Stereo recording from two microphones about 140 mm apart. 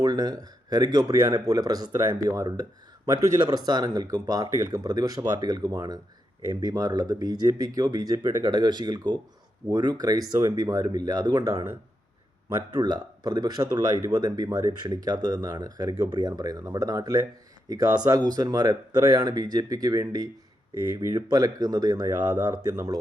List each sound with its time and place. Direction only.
0.0 s speech: 30° right (ahead or behind)
12.7 s speech: 30° right (ahead or behind)
22.2 s speech: 15° right (ahead or behind)